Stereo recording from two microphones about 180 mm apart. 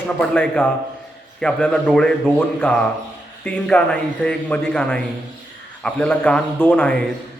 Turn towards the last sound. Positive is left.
turn(degrees=5)  # may be behind; listen again after turning